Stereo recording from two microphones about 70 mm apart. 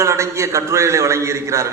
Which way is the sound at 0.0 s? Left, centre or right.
Right.